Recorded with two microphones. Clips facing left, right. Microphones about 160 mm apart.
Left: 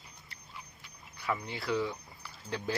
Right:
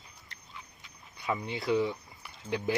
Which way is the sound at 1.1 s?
20° right (ahead or behind).